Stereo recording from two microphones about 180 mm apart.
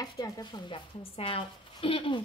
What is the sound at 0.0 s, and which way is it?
A woman's voice, 20° left (ahead or behind).